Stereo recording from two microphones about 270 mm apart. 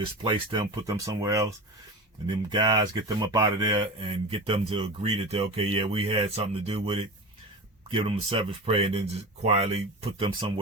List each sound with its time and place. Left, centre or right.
0.2 s speech: centre